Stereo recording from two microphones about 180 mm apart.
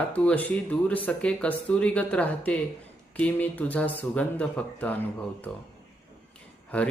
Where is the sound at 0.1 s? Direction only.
5° left (ahead or behind).